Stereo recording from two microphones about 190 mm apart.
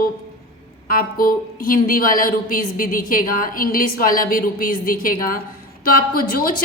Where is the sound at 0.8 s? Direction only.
50° left (ahead or behind).